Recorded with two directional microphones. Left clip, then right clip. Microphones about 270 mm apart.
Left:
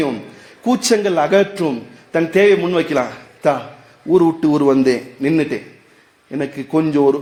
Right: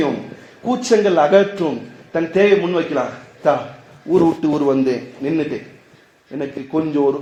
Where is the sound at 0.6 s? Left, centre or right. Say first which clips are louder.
Even; left.